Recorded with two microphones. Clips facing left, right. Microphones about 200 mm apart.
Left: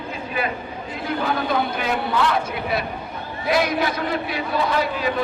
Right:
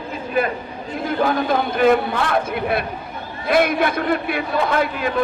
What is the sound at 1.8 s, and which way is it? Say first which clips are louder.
A man's voice: right 6 dB; 50° right (ahead or behind).